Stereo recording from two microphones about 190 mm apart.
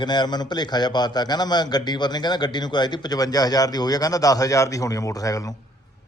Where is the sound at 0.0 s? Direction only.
25° left (ahead or behind).